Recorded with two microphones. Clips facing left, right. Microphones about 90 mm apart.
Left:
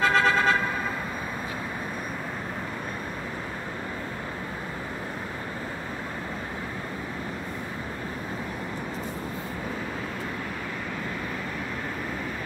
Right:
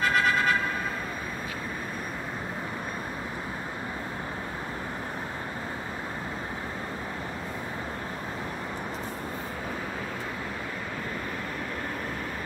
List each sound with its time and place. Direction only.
0.1 s vehicle: 25° left (ahead or behind)